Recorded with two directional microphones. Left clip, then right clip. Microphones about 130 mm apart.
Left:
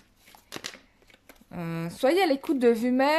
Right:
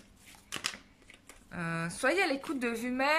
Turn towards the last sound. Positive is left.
turn(degrees=45)  # may be behind; listen again after turning